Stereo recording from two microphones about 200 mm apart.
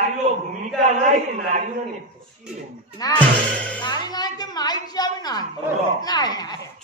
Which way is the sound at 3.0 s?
20° left (ahead or behind).